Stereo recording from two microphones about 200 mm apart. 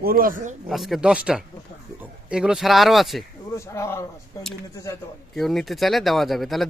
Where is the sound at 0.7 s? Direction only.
Centre (ahead or behind).